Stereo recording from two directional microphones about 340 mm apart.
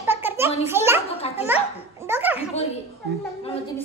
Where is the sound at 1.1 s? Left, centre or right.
Centre.